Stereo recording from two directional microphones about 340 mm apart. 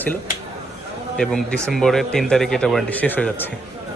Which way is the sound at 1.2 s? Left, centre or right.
Centre.